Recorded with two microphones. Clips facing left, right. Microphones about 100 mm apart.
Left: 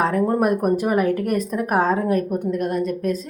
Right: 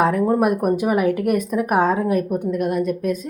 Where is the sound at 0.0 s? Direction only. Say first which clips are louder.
Right 2 dB; 10° right (ahead or behind).